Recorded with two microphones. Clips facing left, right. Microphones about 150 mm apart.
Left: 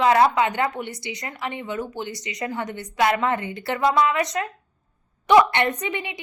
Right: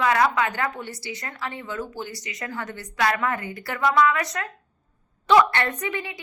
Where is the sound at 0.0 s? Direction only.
25° left (ahead or behind).